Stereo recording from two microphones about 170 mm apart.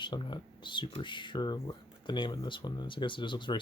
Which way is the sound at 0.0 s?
25° left (ahead or behind).